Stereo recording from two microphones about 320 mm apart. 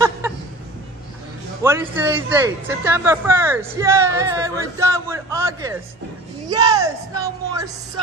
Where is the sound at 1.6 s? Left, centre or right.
Centre.